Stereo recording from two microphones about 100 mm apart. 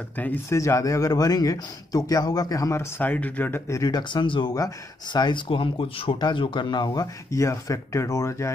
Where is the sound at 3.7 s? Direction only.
35° left (ahead or behind); by 4.5 s 55° left (ahead or behind).